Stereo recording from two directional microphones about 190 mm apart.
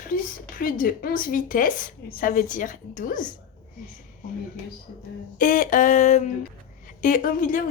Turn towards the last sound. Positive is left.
turn(degrees=45)  # may be behind; listen again after turning